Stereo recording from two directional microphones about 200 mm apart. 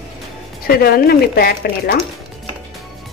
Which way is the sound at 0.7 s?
50° left (ahead or behind).